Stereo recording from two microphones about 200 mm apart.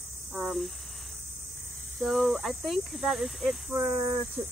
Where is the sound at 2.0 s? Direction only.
Centre (ahead or behind).